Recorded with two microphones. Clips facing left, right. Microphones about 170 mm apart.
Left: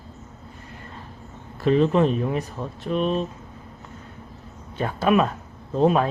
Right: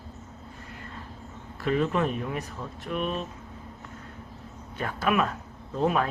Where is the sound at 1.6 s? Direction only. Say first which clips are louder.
Left 7 dB; 30° left (ahead or behind).